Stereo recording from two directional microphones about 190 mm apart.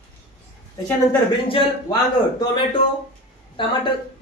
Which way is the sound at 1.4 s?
25° left (ahead or behind).